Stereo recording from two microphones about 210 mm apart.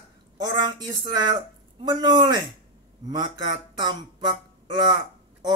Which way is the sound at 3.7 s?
20° right (ahead or behind).